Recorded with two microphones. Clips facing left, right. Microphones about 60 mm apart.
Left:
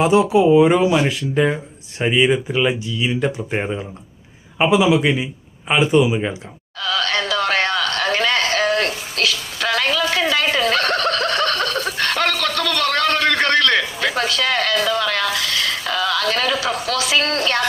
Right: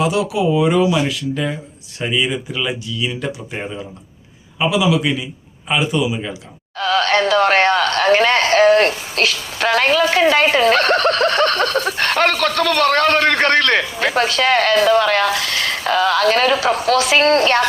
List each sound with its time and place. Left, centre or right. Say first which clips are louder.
0.0 s speech: left 3 dB; left
4.5 s speech: left 2 dB; left
6.7 s speech: right 5 dB; right